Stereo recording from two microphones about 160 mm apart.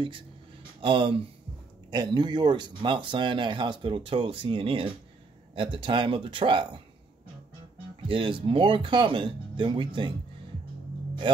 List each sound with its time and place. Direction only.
0.7 s speech: 30° right (ahead or behind)
8.1 s speech: 35° right (ahead or behind)